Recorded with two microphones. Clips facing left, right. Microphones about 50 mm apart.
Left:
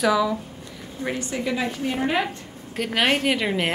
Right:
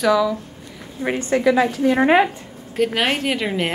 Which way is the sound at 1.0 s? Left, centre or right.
Right.